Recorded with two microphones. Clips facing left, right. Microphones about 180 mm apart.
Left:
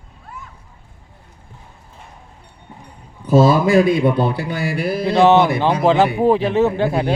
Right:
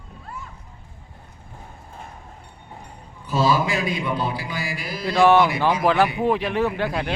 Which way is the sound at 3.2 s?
50° left (ahead or behind).